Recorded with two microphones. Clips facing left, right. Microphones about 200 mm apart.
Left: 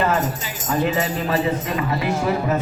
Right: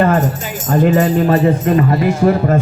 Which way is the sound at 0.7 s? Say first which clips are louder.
Right 9 dB; 50° right (ahead or behind).